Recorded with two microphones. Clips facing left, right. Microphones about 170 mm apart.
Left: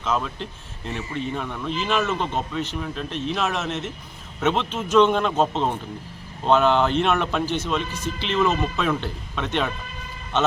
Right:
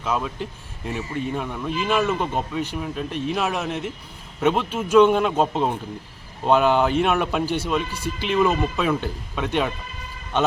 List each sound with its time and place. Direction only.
0.0 s a man's voice: 10° right (ahead or behind)